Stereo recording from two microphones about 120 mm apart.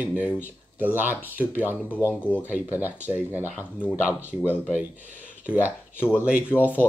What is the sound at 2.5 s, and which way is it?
Speech, 15° right (ahead or behind).